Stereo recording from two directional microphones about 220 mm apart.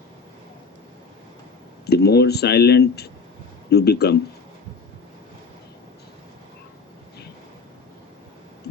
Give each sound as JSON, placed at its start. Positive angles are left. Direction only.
{"t": 1.9, "sound": "speech", "side_deg": 45}